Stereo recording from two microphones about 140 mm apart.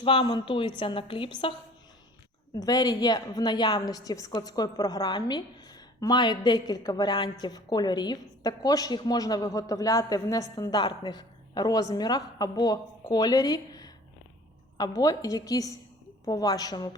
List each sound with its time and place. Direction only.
0.0 s a woman's voice: 40° left (ahead or behind)
2.6 s a woman's voice: 30° left (ahead or behind)